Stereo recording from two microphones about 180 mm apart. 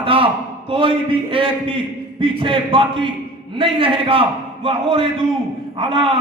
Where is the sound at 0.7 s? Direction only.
30° right (ahead or behind).